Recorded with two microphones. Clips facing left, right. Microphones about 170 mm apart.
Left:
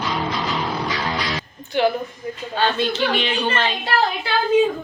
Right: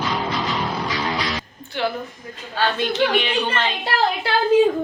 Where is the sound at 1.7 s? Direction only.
15° left (ahead or behind).